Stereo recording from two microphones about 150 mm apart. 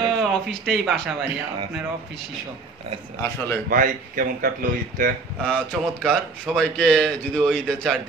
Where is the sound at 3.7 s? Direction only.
65° right (ahead or behind).